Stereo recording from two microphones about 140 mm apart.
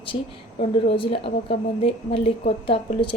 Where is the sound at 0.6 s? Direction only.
40° left (ahead or behind).